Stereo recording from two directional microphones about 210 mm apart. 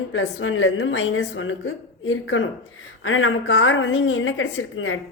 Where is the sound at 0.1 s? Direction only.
65° left (ahead or behind).